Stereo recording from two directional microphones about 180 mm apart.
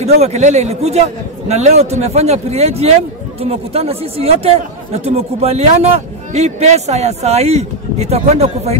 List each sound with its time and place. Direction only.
0.0 s a man's voice: 35° right (ahead or behind)